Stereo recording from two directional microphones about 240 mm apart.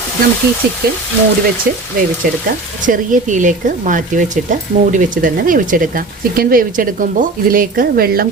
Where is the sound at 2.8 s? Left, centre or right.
Right.